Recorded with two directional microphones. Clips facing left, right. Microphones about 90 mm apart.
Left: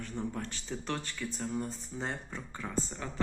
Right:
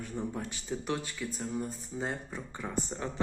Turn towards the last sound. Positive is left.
turn(degrees=-25)  # may be behind; listen again after turning